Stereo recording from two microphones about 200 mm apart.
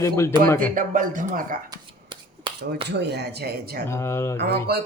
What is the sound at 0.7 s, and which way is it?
Speech, 40° right (ahead or behind).